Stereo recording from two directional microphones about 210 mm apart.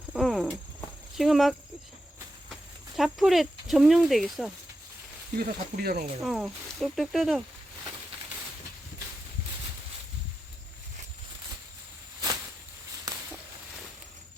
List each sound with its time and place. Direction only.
0.1 s a sound: centre (ahead or behind)
1.1 s speech: centre (ahead or behind)
2.9 s speech: centre (ahead or behind)
5.4 s speech: 45° right (ahead or behind)
6.2 s speech: centre (ahead or behind)
13.1 s a sound: 20° right (ahead or behind)